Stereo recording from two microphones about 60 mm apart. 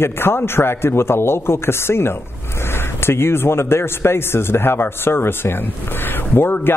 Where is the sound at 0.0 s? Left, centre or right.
Left.